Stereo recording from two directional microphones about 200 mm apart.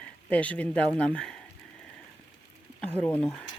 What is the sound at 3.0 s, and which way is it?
Speech, 10° left (ahead or behind).